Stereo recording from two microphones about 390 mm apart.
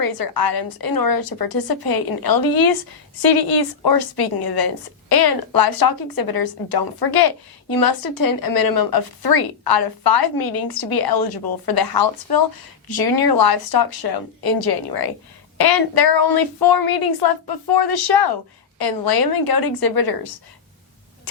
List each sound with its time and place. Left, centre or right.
0.0 s a woman's voice: left